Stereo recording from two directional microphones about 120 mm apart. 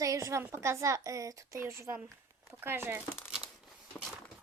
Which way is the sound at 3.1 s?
20° left (ahead or behind).